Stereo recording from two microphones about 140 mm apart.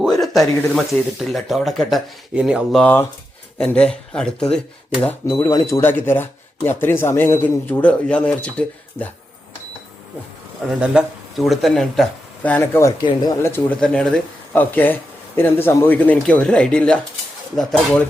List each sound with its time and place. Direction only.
0.2 s speech: centre (ahead or behind)
2.8 s speech: 15° left (ahead or behind)
5.4 s speech: 25° left (ahead or behind)
10.7 s speech: 5° right (ahead or behind); by 12.9 s 15° left (ahead or behind)
13.0 s speech: 30° left (ahead or behind)
13.7 s speech: 5° left (ahead or behind)